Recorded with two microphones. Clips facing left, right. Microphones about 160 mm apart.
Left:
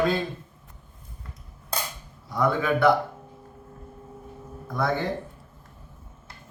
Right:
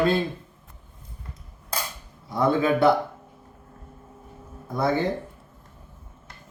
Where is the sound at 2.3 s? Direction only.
25° right (ahead or behind).